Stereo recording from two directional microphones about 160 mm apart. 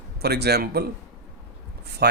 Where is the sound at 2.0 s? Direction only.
80° right.